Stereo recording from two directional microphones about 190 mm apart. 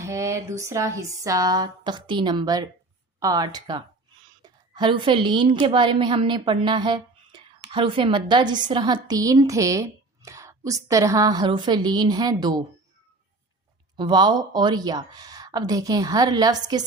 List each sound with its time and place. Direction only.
0.0 s a woman's voice: 15° right (ahead or behind)
13.9 s a woman's voice: 25° right (ahead or behind)